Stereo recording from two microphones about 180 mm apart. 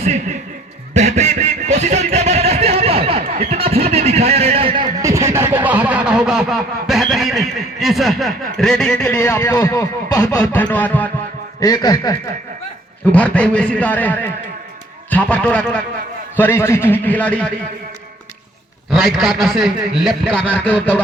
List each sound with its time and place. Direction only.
0.0 s a man's voice: 40° right (ahead or behind)
0.9 s a sound: 40° right (ahead or behind); by 10.5 s 20° left (ahead or behind)
10.5 s a man's voice: 10° left (ahead or behind)
11.6 s a man's voice: 20° left (ahead or behind)
13.1 s a man's voice: 10° left (ahead or behind)
18.9 s a man's voice: centre (ahead or behind)